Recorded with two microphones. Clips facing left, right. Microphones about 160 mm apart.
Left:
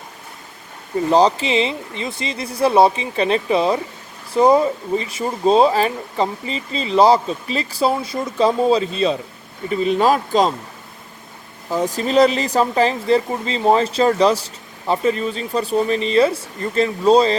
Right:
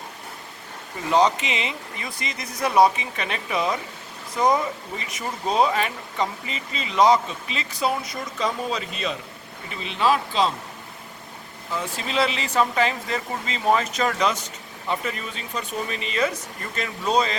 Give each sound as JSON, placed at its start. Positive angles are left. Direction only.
{"t": 1.1, "sound": "speech", "side_deg": 30}
{"t": 9.6, "sound": "speech", "side_deg": 45}
{"t": 11.7, "sound": "speech", "side_deg": 40}